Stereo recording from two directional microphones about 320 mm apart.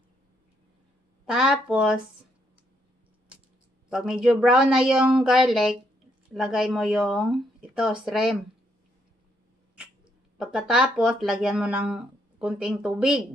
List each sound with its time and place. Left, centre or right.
1.2 s speech: centre
3.9 s speech: centre
10.3 s speech: centre